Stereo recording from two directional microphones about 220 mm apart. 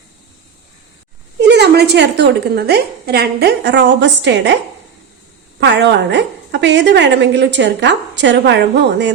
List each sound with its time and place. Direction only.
1.4 s a woman's voice: 50° right (ahead or behind)
5.5 s a woman's voice: 50° right (ahead or behind)